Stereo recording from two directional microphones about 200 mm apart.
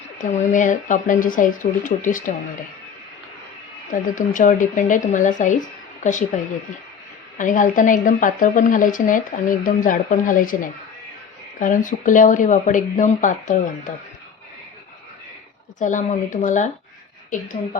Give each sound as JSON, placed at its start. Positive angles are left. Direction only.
{"t": 0.2, "sound": "speech", "side_deg": 40}
{"t": 4.1, "sound": "speech", "side_deg": 40}
{"t": 15.8, "sound": "speech", "side_deg": 40}